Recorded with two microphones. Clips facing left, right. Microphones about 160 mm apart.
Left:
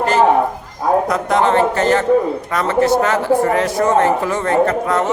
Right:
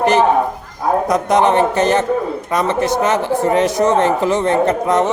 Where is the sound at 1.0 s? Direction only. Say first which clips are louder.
Right 2 dB; 20° right (ahead or behind).